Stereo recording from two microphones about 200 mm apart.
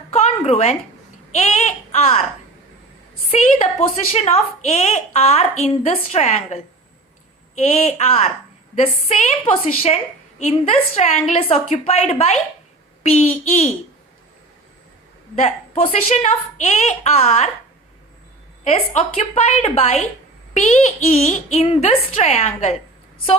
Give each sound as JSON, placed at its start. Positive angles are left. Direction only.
{"t": 0.1, "sound": "a sound", "side_deg": 35}
{"t": 1.4, "sound": "speech", "side_deg": 35}
{"t": 3.3, "sound": "a woman's voice", "side_deg": 30}
{"t": 15.4, "sound": "a woman's voice", "side_deg": 35}
{"t": 18.6, "sound": "a woman's voice", "side_deg": 35}